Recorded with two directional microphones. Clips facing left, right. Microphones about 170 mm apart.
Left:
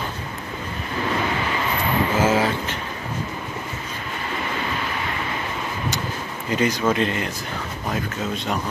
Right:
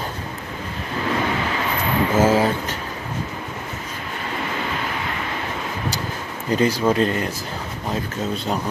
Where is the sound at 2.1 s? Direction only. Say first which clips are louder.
Right 4 dB; 40° right (ahead or behind).